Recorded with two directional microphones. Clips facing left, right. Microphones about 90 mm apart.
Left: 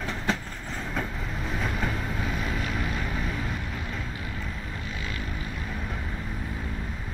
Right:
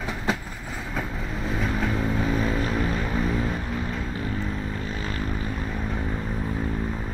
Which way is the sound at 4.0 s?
35° right (ahead or behind).